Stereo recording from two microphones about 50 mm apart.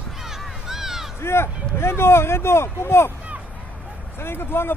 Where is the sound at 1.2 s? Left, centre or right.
Left.